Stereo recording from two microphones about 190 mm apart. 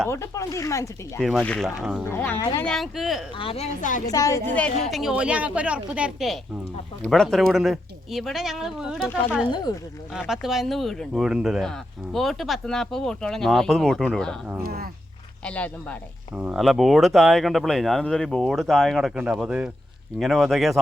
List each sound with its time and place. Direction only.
0.1 s speech: 15° left (ahead or behind)
1.2 s speech: centre (ahead or behind)
2.0 s speech: 10° left (ahead or behind)
3.3 s speech: 30° left (ahead or behind)
4.1 s speech: 20° left (ahead or behind); by 9.0 s centre (ahead or behind)
9.5 s speech: 20° left (ahead or behind)
10.2 s speech: centre (ahead or behind)
14.6 s speech: 55° right (ahead or behind)
15.4 s speech: 5° left (ahead or behind)
16.3 s speech: 5° right (ahead or behind)